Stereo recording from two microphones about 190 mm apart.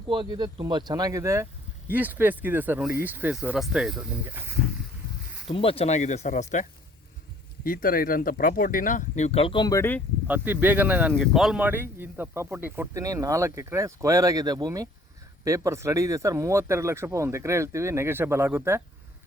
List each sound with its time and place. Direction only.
0.1 s speech: 25° right (ahead or behind); by 4.5 s 10° right (ahead or behind)
5.5 s speech: 30° left (ahead or behind)
10.2 s speech: 10° right (ahead or behind)
11.1 s speech: centre (ahead or behind)